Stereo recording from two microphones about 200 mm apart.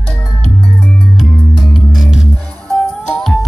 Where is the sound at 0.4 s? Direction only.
5° left (ahead or behind).